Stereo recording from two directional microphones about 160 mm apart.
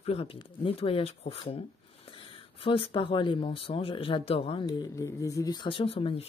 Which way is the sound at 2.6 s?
35° left (ahead or behind).